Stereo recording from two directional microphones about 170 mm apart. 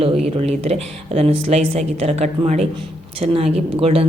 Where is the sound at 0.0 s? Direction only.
35° right (ahead or behind).